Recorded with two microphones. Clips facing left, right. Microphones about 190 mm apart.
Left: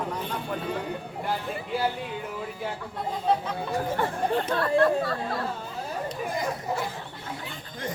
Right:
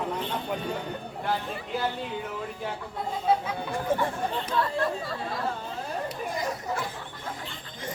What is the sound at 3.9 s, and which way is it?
Speech, 50° right (ahead or behind).